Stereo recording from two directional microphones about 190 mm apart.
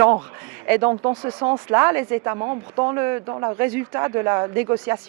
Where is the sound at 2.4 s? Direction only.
25° right (ahead or behind).